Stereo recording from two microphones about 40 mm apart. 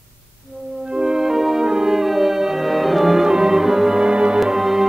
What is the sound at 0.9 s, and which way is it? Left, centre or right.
Music, centre.